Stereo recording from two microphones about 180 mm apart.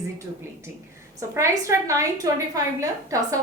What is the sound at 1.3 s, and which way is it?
A woman's voice, 15° right (ahead or behind).